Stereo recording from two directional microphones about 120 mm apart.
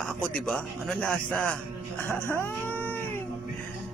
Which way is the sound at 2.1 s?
20° left (ahead or behind).